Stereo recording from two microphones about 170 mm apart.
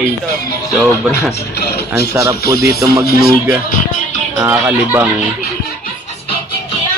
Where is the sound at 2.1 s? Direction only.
15° right (ahead or behind).